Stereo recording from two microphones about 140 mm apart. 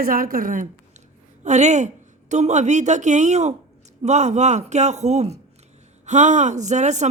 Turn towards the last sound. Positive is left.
turn(degrees=-55)  # may be behind; listen again after turning